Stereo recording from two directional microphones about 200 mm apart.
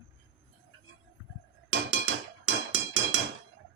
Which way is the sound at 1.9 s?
75° right (ahead or behind).